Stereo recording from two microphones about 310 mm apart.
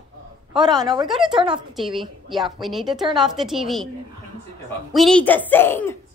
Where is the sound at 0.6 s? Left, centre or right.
Centre.